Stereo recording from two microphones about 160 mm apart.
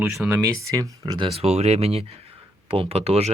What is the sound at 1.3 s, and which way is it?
Speech, 40° right (ahead or behind).